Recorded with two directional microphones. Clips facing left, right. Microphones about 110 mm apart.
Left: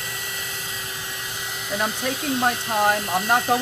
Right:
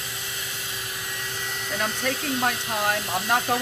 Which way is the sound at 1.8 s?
25° left (ahead or behind).